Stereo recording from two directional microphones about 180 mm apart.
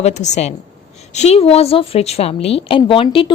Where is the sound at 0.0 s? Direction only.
40° left (ahead or behind).